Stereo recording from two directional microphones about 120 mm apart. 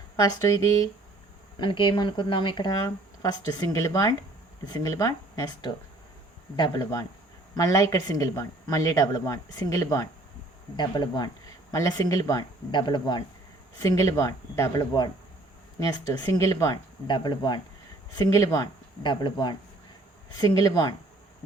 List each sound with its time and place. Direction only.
0.2 s speech: 30° left (ahead or behind)
1.5 s speech: 45° left (ahead or behind); by 10.1 s 25° left (ahead or behind)
10.8 s speech: 35° left (ahead or behind)
13.7 s speech: 30° left (ahead or behind)
17.1 s speech: 40° left (ahead or behind)
18.2 s speech: 25° left (ahead or behind)
19.0 s speech: 40° left (ahead or behind)